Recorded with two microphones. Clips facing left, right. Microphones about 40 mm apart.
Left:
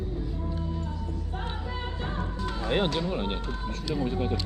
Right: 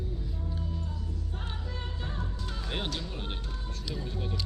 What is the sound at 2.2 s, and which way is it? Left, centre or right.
Music, left.